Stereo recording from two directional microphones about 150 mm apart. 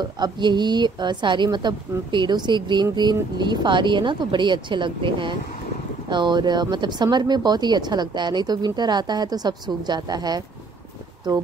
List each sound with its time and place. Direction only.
0.0 s speech: 30° right (ahead or behind)